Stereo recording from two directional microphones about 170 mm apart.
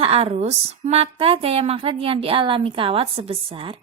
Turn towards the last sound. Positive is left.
turn(degrees=-30)  # may be behind; listen again after turning